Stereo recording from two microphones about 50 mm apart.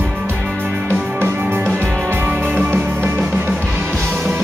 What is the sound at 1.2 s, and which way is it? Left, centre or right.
Music, right.